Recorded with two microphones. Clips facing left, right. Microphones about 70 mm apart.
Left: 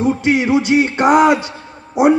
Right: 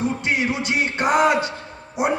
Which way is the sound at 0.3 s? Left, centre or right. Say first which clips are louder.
Left 9 dB; left.